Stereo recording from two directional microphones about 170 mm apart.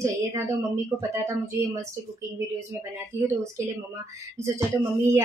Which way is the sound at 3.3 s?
15° right (ahead or behind).